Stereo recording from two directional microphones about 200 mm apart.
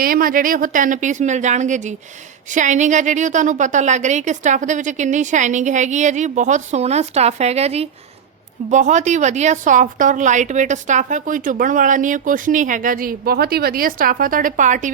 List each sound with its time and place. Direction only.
0.0 s a woman's voice: 45° right (ahead or behind)